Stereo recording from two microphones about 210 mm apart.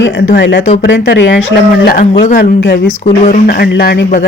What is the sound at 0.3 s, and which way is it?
Speech, 60° left (ahead or behind).